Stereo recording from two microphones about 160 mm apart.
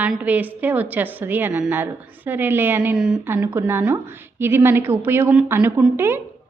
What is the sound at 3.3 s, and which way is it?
A woman's voice, 15° right (ahead or behind).